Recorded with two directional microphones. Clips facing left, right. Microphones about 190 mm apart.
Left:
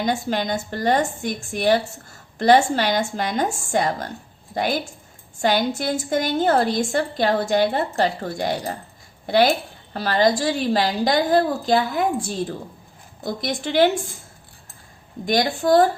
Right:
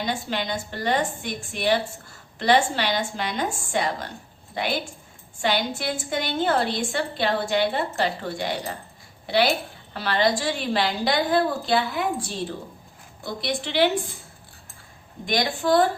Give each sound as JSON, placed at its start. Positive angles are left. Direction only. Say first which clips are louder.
{"t": 0.0, "sound": "a woman's voice", "louder": "left 5 dB", "side_deg": 45}
{"t": 15.3, "sound": "a woman's voice", "louder": "left 4 dB", "side_deg": 40}